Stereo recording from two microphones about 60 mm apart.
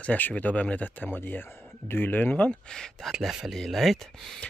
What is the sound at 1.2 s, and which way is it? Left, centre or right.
Speech, left.